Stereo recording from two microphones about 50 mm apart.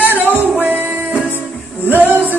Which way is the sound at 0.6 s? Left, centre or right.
Right.